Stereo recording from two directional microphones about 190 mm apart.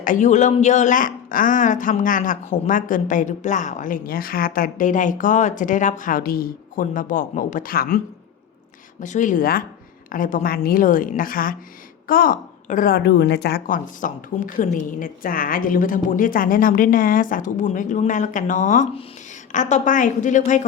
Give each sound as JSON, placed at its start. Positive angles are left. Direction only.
{"t": 0.0, "sound": "a man's voice", "side_deg": 40}